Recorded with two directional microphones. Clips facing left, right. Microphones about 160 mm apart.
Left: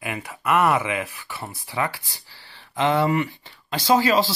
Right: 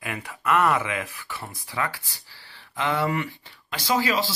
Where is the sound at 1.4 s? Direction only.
30° left (ahead or behind).